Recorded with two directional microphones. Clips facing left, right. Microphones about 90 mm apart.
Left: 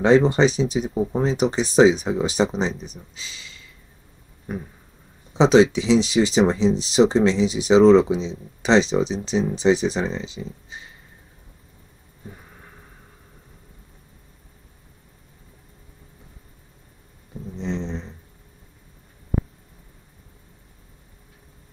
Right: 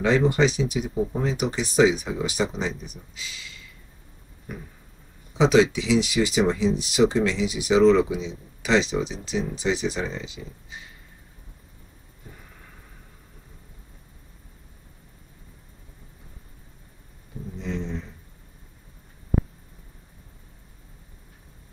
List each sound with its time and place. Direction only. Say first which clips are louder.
0.0 s speech: left 4 dB; 30° left (ahead or behind)
5.4 s speech: left 4 dB; 30° left (ahead or behind)
17.6 s a sound: left 3 dB; 25° left (ahead or behind)